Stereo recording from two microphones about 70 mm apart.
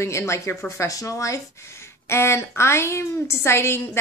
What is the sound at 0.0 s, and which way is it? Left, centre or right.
Speech, left.